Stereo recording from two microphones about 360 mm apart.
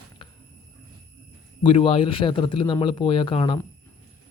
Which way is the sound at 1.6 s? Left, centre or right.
Centre.